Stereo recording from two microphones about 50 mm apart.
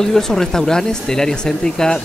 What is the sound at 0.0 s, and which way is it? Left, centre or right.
Speech, centre.